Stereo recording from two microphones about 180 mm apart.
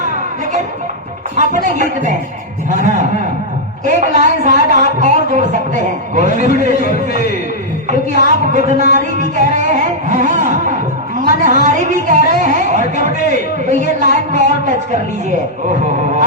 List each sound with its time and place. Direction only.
1.4 s a woman's voice: 45° right (ahead or behind)
3.8 s a woman's voice: 45° right (ahead or behind)